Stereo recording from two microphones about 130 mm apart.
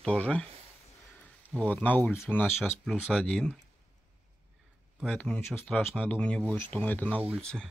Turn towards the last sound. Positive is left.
turn(degrees=-15)  # may be behind; listen again after turning